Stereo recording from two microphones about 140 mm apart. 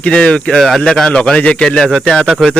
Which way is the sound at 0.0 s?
5° left (ahead or behind).